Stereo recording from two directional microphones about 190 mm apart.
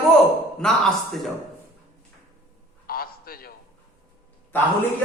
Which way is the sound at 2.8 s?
50° left (ahead or behind).